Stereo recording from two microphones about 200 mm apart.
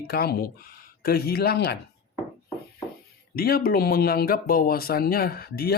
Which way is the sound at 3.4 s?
45° left (ahead or behind).